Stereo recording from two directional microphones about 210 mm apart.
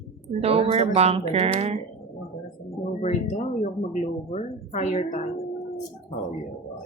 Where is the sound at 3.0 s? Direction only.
35° left (ahead or behind).